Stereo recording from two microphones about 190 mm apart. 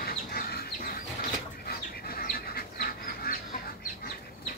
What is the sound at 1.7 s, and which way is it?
Bird, 50° left (ahead or behind).